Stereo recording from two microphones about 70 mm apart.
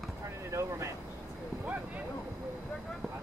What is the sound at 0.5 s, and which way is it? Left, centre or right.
Vehicle, right.